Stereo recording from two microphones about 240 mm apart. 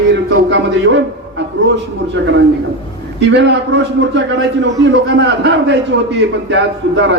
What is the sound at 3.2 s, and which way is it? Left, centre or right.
A man's voice, right.